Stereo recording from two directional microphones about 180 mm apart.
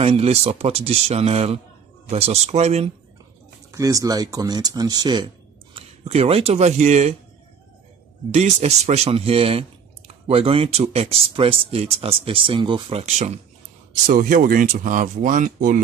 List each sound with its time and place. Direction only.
0.0 s speech: 35° right (ahead or behind)
3.7 s speech: 20° right (ahead or behind); by 7.2 s 40° right (ahead or behind)
8.3 s speech: 40° right (ahead or behind)
13.0 s speech: 40° right (ahead or behind)